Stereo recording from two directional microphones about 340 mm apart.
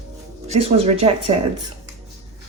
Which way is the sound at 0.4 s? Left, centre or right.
Centre.